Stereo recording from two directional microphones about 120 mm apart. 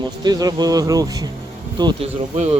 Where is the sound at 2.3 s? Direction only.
65° right (ahead or behind).